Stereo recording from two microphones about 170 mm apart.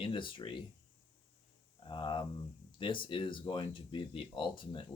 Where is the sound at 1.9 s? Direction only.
30° left (ahead or behind).